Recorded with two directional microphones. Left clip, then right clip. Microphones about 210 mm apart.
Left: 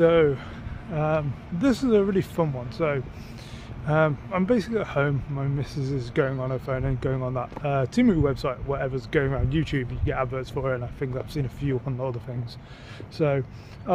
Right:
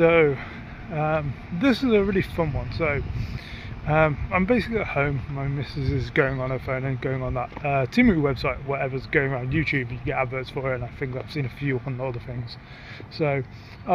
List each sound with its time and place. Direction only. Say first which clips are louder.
0.0 s speech: right 1 dB; 5° left (ahead or behind)
5.9 s speech: right 3 dB; centre (ahead or behind)
13.2 s speech: even; 15° left (ahead or behind)